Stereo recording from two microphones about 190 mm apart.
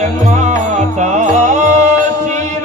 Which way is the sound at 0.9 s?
40° right (ahead or behind).